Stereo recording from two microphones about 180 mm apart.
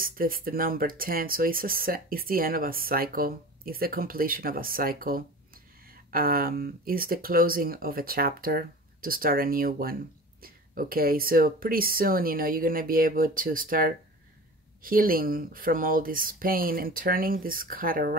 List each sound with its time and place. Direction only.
0.0 s speech: 50° right (ahead or behind)